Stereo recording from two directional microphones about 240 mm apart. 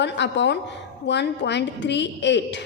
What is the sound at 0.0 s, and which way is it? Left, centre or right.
A woman's voice, left.